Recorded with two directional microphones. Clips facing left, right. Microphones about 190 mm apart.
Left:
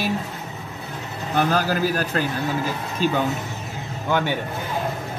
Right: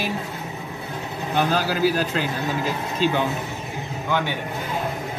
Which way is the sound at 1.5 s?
45° left (ahead or behind).